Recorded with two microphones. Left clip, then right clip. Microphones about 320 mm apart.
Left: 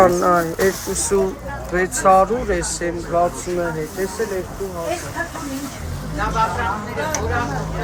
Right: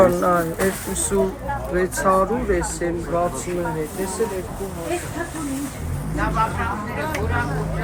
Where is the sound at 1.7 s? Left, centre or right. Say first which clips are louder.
Left 5 dB; left.